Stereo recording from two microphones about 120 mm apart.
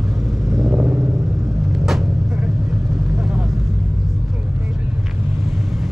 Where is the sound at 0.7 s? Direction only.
15° right (ahead or behind).